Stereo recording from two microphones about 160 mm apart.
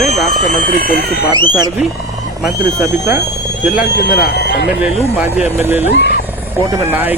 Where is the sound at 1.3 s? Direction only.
25° right (ahead or behind).